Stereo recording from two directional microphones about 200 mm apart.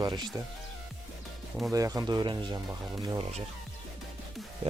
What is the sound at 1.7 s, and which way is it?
Speech, 15° right (ahead or behind).